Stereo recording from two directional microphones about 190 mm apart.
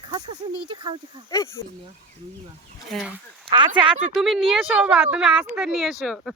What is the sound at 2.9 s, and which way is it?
Speech, centre (ahead or behind).